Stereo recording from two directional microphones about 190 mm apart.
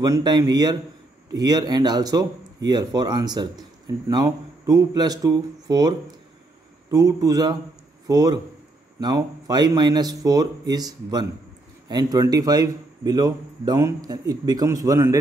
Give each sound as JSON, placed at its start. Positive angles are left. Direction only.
{"t": 0.0, "sound": "a man's voice", "side_deg": -20}